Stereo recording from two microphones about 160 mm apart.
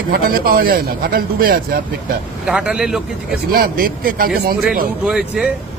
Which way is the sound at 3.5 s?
65° right (ahead or behind).